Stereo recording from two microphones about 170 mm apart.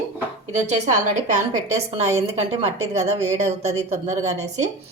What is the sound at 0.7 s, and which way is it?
A woman's voice, 45° right (ahead or behind).